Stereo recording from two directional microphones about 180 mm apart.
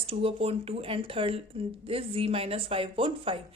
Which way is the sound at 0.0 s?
30° right (ahead or behind).